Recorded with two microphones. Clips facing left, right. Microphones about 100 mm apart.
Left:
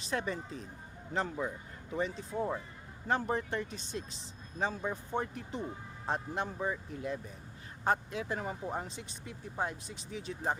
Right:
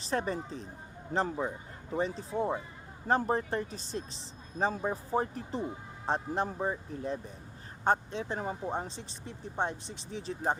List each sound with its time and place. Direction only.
0.0 s speech: 35° right (ahead or behind)